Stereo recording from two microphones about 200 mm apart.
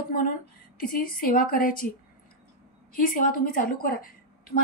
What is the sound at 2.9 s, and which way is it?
A woman's voice, 45° left (ahead or behind).